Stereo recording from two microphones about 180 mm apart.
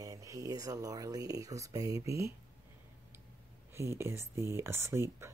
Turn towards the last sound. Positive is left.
turn(degrees=-15)  # may be behind; listen again after turning